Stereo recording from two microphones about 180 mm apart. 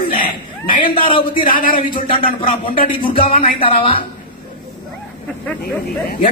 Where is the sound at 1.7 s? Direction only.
25° left (ahead or behind).